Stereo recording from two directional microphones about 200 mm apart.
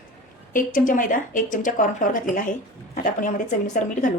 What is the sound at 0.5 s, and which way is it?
A woman's voice, 40° left (ahead or behind).